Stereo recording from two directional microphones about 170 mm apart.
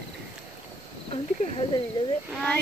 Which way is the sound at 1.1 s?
35° left (ahead or behind).